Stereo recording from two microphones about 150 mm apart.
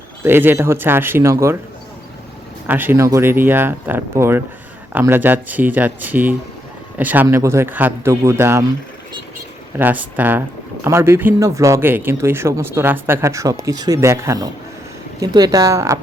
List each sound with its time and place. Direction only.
0.3 s speech: 15° right (ahead or behind)
2.6 s speech: 15° right (ahead or behind)
9.7 s speech: 10° right (ahead or behind)